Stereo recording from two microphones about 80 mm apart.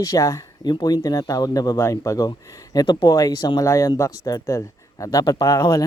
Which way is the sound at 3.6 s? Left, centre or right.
Left.